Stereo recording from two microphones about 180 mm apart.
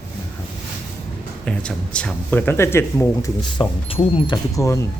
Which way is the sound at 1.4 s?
5° left (ahead or behind).